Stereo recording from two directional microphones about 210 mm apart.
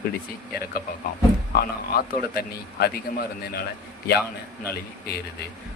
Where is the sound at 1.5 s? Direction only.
45° left (ahead or behind).